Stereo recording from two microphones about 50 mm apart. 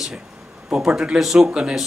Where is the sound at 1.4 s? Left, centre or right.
Right.